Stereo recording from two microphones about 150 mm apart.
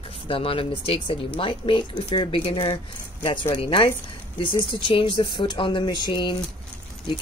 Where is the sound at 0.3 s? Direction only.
40° left (ahead or behind).